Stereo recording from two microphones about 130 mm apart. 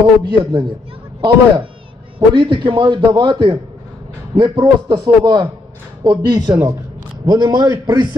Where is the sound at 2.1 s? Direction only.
40° right (ahead or behind).